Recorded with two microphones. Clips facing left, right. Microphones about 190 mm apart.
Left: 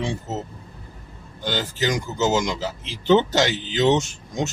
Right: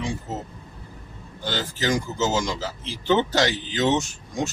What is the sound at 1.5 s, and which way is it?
Speech, 15° left (ahead or behind).